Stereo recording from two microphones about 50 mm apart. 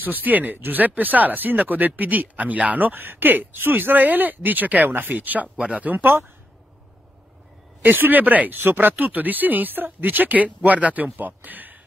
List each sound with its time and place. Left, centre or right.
0.0 s speech: right
7.8 s speech: right